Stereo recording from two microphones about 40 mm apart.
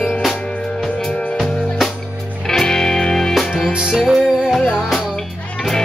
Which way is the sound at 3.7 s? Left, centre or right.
Right.